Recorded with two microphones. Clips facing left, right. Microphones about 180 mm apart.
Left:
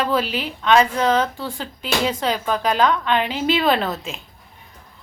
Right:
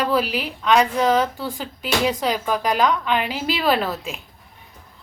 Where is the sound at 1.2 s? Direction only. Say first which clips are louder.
Right 1 dB; 15° right (ahead or behind).